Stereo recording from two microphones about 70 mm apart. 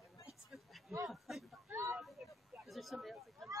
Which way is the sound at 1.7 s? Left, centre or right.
Right.